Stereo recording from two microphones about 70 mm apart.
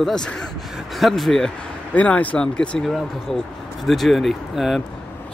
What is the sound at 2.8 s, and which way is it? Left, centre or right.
Speech, centre.